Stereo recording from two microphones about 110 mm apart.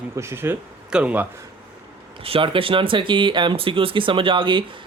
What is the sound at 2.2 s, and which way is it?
Speech, 55° right (ahead or behind).